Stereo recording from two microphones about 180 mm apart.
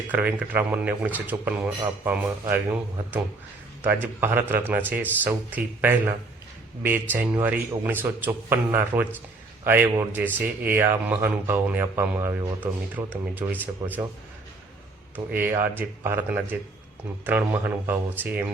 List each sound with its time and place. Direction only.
0.1 s speech: 10° right (ahead or behind)
15.1 s speech: 10° right (ahead or behind)